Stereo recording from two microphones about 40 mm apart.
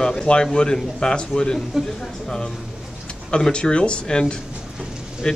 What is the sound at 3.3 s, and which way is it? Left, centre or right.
Speech, left.